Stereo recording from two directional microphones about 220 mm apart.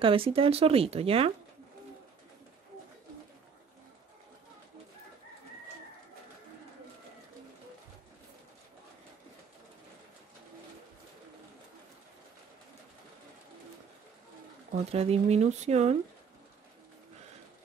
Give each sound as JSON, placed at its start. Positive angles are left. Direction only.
{"t": 0.0, "sound": "speech", "side_deg": -25}
{"t": 14.7, "sound": "speech", "side_deg": -30}